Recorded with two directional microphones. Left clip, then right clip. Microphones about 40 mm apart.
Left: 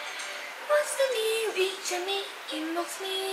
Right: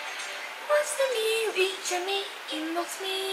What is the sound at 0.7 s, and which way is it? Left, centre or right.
Music, centre.